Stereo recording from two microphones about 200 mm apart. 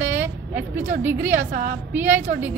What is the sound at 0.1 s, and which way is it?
A woman's voice, 10° right (ahead or behind).